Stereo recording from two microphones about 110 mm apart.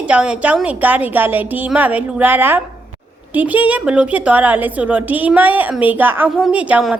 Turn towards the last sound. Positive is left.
turn(degrees=-10)  # may be behind; listen again after turning